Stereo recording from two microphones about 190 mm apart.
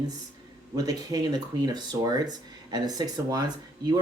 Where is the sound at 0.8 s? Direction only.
20° right (ahead or behind).